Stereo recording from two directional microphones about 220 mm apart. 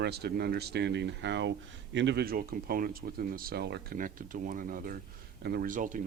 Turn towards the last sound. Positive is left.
turn(degrees=-35)  # may be behind; listen again after turning